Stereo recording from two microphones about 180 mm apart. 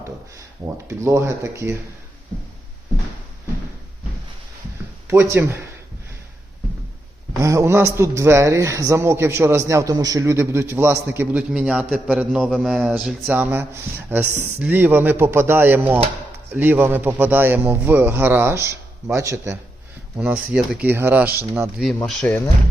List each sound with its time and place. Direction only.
0.9 s a man's voice: 15° right (ahead or behind)
5.0 s a man's voice: 15° right (ahead or behind)
7.4 s a man's voice: 15° right (ahead or behind)
21.9 s speech: 5° left (ahead or behind)